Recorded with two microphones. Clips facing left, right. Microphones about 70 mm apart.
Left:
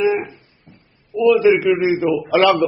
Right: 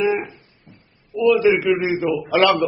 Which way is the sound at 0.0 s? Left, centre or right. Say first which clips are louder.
Left 2 dB; centre.